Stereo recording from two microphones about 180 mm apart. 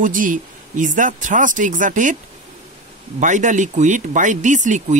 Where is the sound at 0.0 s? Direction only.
45° right (ahead or behind).